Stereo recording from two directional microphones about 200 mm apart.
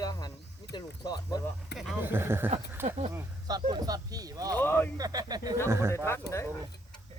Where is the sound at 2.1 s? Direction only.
10° right (ahead or behind).